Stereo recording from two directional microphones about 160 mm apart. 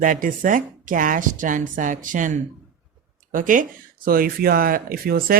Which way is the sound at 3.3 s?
55° right (ahead or behind).